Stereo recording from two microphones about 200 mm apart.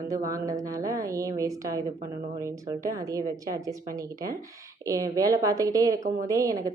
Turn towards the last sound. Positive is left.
turn(degrees=-15)  # may be behind; listen again after turning